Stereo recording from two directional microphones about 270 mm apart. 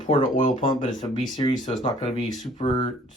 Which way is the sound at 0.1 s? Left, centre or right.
Left.